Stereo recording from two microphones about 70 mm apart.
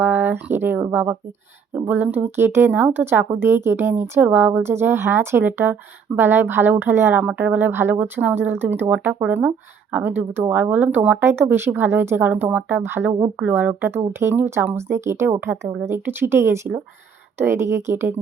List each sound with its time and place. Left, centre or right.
0.0 s speech: right
11.2 s speech: right
12.3 s speech: right